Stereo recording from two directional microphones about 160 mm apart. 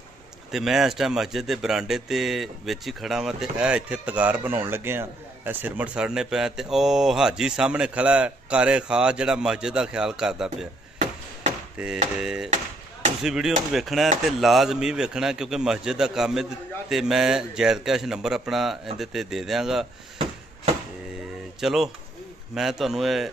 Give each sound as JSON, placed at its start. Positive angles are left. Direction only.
{"t": 0.5, "sound": "speech", "side_deg": 0}
{"t": 11.8, "sound": "speech", "side_deg": -5}
{"t": 21.5, "sound": "speech", "side_deg": 0}